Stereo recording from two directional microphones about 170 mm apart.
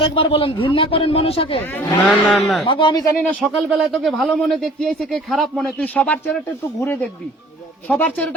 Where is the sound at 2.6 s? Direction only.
30° left (ahead or behind).